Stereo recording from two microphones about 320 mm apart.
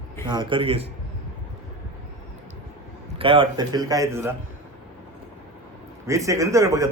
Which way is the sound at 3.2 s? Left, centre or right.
Centre.